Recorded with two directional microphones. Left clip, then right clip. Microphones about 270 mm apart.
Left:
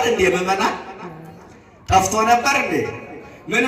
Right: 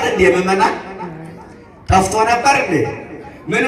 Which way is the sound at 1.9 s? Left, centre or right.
Left.